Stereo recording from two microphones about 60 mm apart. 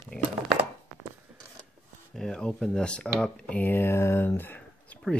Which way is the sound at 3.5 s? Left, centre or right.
Left.